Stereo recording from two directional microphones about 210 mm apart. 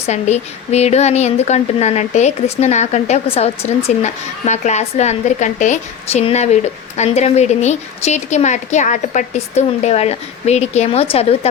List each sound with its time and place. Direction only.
0.0 s a woman's voice: 30° left (ahead or behind)